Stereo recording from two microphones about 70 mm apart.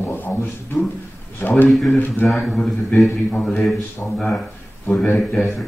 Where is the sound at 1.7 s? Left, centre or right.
Centre.